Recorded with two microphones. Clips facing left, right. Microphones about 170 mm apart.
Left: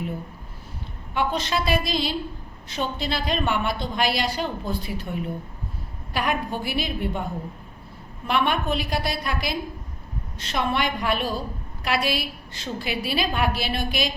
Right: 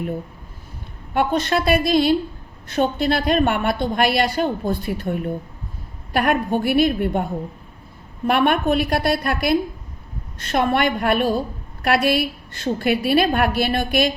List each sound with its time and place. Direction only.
1.1 s a woman's voice: 55° right (ahead or behind)
8.3 s a woman's voice: 55° right (ahead or behind)